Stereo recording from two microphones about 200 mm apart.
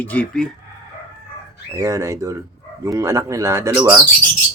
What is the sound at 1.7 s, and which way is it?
Speech, 15° right (ahead or behind).